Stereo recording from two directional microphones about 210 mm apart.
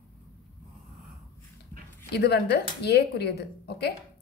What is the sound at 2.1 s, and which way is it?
Speech, 50° left (ahead or behind).